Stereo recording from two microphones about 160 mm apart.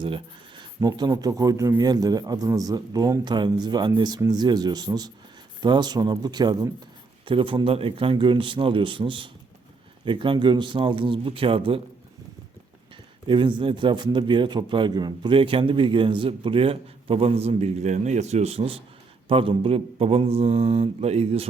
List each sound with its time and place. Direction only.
0.0 s a man's voice: 30° right (ahead or behind)
13.2 s a man's voice: 30° right (ahead or behind)